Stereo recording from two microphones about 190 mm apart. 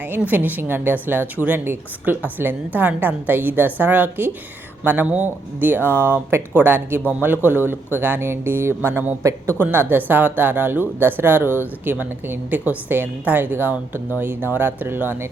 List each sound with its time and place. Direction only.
0.0 s speech: 10° right (ahead or behind)